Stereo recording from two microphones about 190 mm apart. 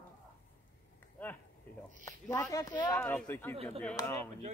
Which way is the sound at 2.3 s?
15° left (ahead or behind).